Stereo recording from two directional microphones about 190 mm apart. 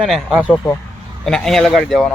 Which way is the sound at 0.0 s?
Centre (ahead or behind).